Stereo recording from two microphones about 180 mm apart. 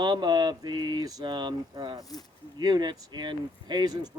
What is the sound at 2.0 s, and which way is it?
Speech, 20° left (ahead or behind).